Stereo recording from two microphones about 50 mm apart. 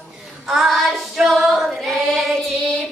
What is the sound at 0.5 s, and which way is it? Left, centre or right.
Child singing, centre.